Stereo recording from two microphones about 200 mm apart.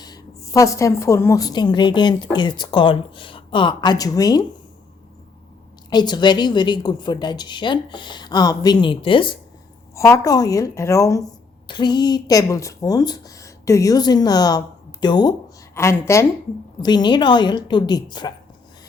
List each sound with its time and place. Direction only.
0.0 s a woman's voice: 20° left (ahead or behind)
5.9 s a woman's voice: 20° left (ahead or behind)
9.9 s a woman's voice: 15° left (ahead or behind)